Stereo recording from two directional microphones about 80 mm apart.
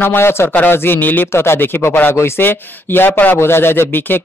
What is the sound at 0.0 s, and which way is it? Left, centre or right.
Speech, left.